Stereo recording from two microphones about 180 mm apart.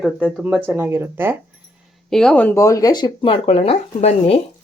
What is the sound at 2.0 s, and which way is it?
Speech, 5° left (ahead or behind).